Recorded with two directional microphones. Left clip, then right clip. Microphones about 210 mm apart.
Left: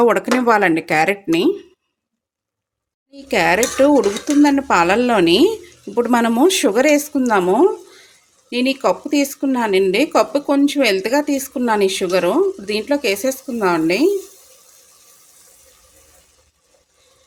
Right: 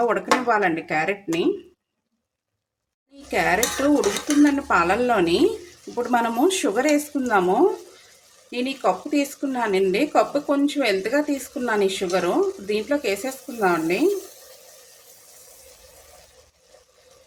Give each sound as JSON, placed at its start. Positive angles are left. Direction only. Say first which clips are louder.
{"t": 0.0, "sound": "speech", "louder": "left 6 dB", "side_deg": 50}
{"t": 3.2, "sound": "speech", "louder": "left 5 dB", "side_deg": 40}
{"t": 8.4, "sound": "speech", "louder": "left 6 dB", "side_deg": 45}